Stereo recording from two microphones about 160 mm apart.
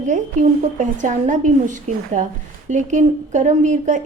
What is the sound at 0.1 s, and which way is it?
A woman's voice, 50° right (ahead or behind).